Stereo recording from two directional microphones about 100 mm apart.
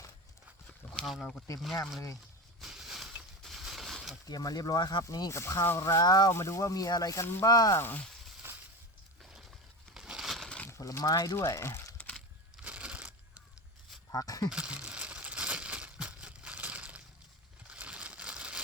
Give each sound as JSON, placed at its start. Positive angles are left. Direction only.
{"t": 1.2, "sound": "speech", "side_deg": 10}
{"t": 2.6, "sound": "a sound", "side_deg": -5}
{"t": 4.3, "sound": "speech", "side_deg": 40}
{"t": 7.4, "sound": "speech", "side_deg": 35}
{"t": 7.8, "sound": "speech", "side_deg": 20}
{"t": 8.4, "sound": "a sound", "side_deg": -20}
{"t": 9.9, "sound": "crushing", "side_deg": -5}
{"t": 10.7, "sound": "speech", "side_deg": 30}
{"t": 11.9, "sound": "a sound", "side_deg": 10}
{"t": 12.6, "sound": "crushing", "side_deg": -15}
{"t": 14.1, "sound": "speech", "side_deg": 35}
{"t": 14.5, "sound": "crumpling", "side_deg": -10}
{"t": 17.7, "sound": "a sound", "side_deg": -10}